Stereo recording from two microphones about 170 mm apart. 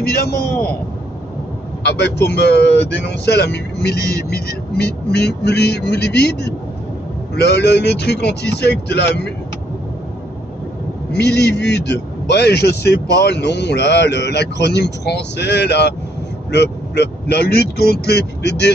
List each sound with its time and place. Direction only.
0.0 s speech: 65° left (ahead or behind)
0.5 s a man's voice: 15° left (ahead or behind)
1.9 s a man's voice: 75° left (ahead or behind)
11.1 s a man's voice: 80° left